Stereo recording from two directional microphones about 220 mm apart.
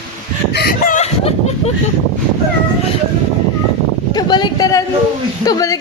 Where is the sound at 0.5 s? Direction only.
45° left (ahead or behind).